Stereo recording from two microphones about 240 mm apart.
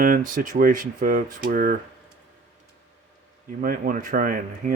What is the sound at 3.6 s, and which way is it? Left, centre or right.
Speech, right.